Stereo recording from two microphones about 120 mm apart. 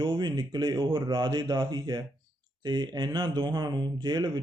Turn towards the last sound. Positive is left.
turn(degrees=-35)  # may be behind; listen again after turning